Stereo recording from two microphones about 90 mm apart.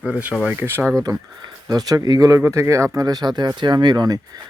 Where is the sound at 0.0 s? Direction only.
15° right (ahead or behind).